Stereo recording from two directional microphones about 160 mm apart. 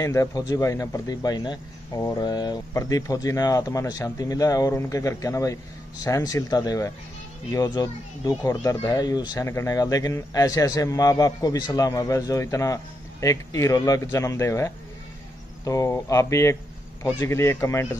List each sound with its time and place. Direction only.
0.0 s a man's voice: 20° left (ahead or behind)